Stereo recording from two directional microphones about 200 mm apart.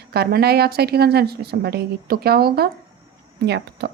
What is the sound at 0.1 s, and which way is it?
A woman's voice, 50° right (ahead or behind).